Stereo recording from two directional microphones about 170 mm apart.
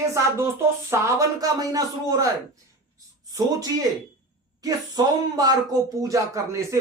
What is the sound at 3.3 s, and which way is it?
Speech, 20° right (ahead or behind).